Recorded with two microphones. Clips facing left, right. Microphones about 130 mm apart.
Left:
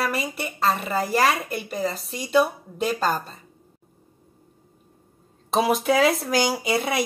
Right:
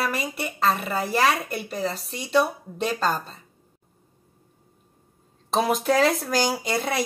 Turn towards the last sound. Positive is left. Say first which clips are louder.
# left 2 dB
turn(degrees=5)  # may be behind; listen again after turning